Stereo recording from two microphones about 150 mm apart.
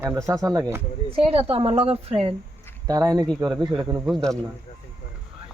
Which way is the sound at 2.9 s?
25° right (ahead or behind).